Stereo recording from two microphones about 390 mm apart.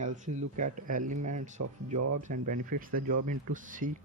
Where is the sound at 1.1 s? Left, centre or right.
Right.